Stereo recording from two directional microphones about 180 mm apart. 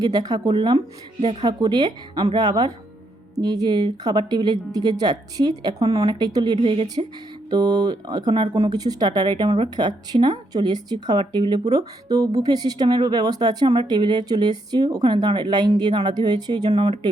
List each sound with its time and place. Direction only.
0.0 s speech: 20° right (ahead or behind)
1.2 s speech: 35° right (ahead or behind)
1.5 s speech: 20° right (ahead or behind)
16.7 s speech: 35° right (ahead or behind)